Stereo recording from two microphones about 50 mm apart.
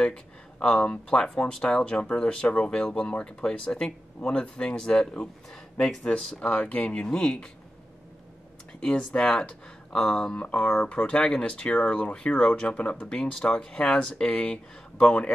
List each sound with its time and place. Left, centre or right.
0.0 s speech: left
6.0 s speech: left
8.7 s speech: left
10.3 s speech: left
12.7 s speech: left
13.0 s speech: centre